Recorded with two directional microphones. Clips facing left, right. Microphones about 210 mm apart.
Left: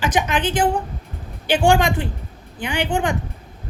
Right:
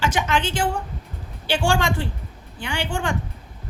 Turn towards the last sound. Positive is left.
turn(degrees=15)  # may be behind; listen again after turning